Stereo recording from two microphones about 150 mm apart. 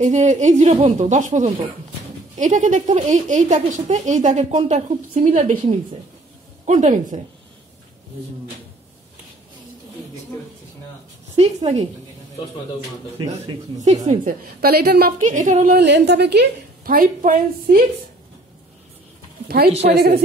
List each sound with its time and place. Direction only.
0.0 s a woman's voice: 55° right (ahead or behind)
6.6 s a woman's voice: 55° right (ahead or behind)
11.3 s a woman's voice: 45° right (ahead or behind)
13.2 s speech: 30° right (ahead or behind)
13.7 s a woman's voice: 55° right (ahead or behind)
14.6 s a woman's voice: 90° right
15.1 s a woman's voice: 55° right (ahead or behind); by 17.8 s 75° right (ahead or behind)
19.4 s a woman's voice: 90° right